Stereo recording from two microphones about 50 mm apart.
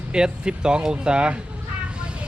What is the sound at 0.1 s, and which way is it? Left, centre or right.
Speech, centre.